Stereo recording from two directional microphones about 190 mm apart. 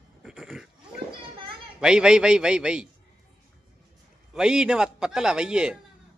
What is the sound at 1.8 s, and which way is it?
A man's voice, 5° right (ahead or behind).